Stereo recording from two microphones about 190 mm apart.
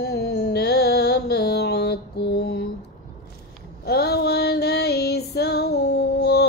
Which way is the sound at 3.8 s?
55° left (ahead or behind).